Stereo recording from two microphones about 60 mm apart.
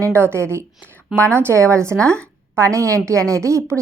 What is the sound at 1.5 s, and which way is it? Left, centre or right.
A woman's voice, right.